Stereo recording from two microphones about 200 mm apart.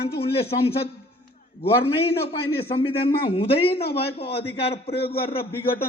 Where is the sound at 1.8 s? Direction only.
30° left (ahead or behind).